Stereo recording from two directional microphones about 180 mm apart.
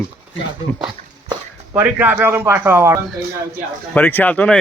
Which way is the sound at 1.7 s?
10° right (ahead or behind).